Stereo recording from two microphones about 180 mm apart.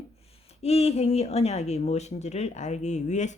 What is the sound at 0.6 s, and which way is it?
Speech, 35° left (ahead or behind).